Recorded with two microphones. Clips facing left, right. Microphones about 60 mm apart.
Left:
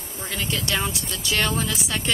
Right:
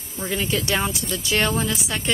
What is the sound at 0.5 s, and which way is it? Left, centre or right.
Speech, centre.